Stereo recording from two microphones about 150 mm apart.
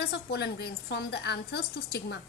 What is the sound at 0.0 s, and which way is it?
A woman's voice, 90° left.